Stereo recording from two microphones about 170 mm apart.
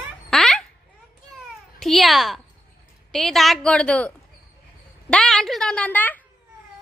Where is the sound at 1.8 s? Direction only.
Centre (ahead or behind).